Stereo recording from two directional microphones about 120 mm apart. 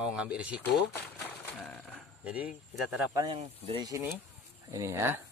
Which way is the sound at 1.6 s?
Centre (ahead or behind).